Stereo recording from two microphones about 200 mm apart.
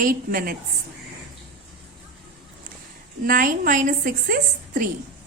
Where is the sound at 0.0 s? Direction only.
45° right (ahead or behind).